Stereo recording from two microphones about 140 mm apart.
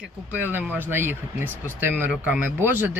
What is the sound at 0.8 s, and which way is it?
Speech, 15° right (ahead or behind).